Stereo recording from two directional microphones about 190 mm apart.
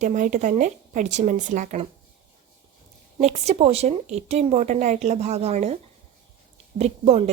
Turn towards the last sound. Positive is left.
turn(degrees=-35)  # may be behind; listen again after turning